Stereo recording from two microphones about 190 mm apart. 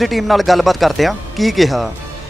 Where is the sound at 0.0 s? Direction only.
Centre (ahead or behind).